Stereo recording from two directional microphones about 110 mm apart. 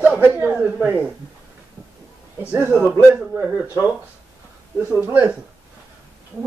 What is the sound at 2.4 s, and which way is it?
A woman's voice, 15° right (ahead or behind).